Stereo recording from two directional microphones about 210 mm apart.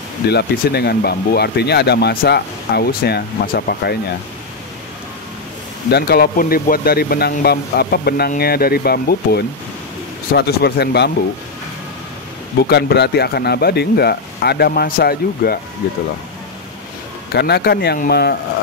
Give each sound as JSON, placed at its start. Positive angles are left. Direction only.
{"t": 0.3, "sound": "speech", "side_deg": 50}
{"t": 5.9, "sound": "speech", "side_deg": 50}
{"t": 12.6, "sound": "speech", "side_deg": 50}
{"t": 17.3, "sound": "speech", "side_deg": 50}